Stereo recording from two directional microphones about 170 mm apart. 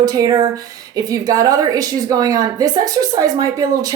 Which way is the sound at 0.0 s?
20° right (ahead or behind).